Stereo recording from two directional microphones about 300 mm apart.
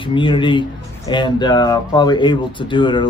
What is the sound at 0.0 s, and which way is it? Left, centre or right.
Speech, centre.